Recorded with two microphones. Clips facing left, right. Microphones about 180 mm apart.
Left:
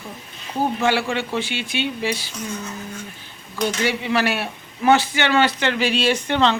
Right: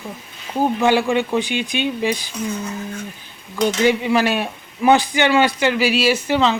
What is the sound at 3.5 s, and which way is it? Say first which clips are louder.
Speech: right 6 dB; 15° right (ahead or behind).